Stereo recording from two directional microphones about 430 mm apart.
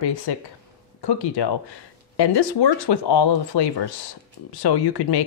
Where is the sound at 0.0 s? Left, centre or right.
Left.